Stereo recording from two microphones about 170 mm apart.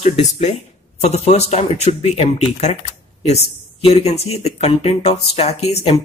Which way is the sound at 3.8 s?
40° left (ahead or behind).